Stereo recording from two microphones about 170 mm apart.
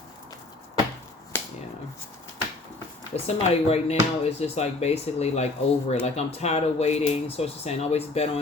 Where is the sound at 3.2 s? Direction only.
35° left (ahead or behind).